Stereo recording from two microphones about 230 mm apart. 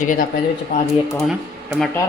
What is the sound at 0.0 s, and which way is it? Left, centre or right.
Speech, left.